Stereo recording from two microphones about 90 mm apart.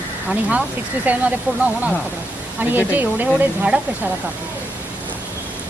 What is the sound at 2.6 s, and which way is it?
Speech, 20° right (ahead or behind).